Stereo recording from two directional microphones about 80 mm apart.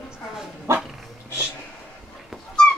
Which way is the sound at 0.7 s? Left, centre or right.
Right.